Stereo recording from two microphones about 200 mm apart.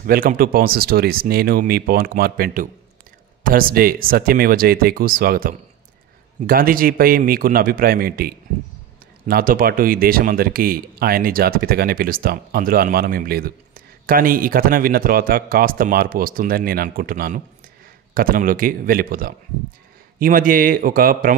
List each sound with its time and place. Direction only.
0.0 s speech: 45° right (ahead or behind)